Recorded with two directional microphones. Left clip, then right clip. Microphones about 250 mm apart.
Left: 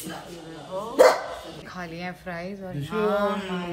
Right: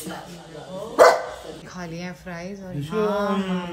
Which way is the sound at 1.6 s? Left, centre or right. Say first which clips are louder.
Left 2 dB; centre.